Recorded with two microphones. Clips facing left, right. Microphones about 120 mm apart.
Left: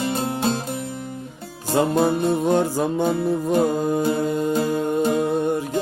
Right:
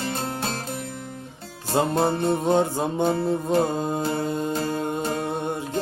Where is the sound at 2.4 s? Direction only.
25° right (ahead or behind).